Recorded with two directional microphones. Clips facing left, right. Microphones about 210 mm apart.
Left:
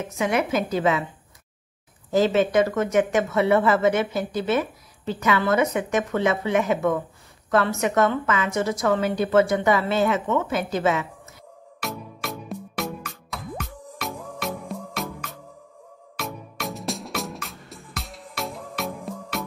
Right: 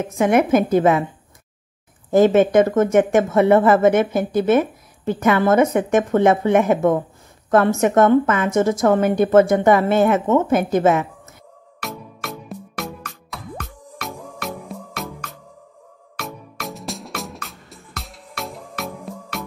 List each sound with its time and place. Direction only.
0.0 s speech: 50° right (ahead or behind)
2.0 s speech: 50° right (ahead or behind)
11.8 s music: centre (ahead or behind)